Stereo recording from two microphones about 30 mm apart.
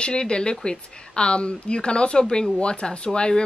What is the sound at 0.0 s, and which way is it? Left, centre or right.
Speech, left.